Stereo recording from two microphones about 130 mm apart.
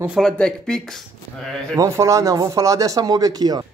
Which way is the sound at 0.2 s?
5° left (ahead or behind).